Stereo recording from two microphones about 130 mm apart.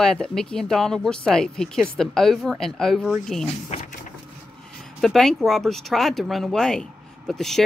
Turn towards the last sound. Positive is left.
turn(degrees=0)  # may be behind; listen again after turning